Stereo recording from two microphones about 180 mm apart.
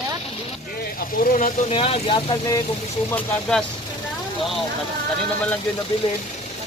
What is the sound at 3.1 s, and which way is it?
Speech, 10° left (ahead or behind).